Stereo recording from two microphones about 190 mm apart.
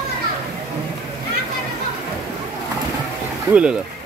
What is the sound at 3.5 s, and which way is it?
Speech, 5° right (ahead or behind).